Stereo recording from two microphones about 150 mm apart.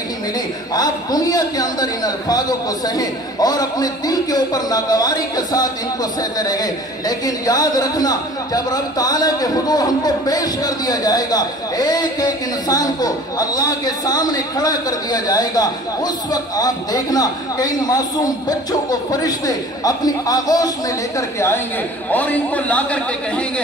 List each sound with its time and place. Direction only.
0.7 s speech: 25° left (ahead or behind)
22.1 s a man's voice: 10° left (ahead or behind)